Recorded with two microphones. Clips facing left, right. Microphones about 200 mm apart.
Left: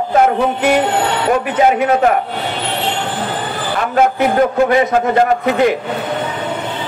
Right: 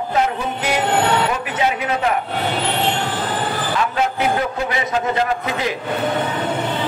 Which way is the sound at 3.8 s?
50° left (ahead or behind).